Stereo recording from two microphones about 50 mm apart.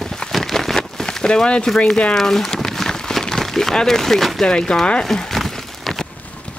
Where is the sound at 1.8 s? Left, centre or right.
Centre.